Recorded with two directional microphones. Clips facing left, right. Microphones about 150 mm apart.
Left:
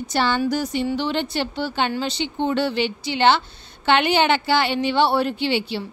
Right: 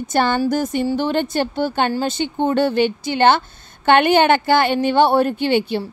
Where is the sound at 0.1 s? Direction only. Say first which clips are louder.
Right 3 dB; 50° right (ahead or behind).